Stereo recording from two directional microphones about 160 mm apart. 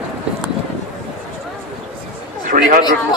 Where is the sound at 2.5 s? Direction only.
55° right (ahead or behind).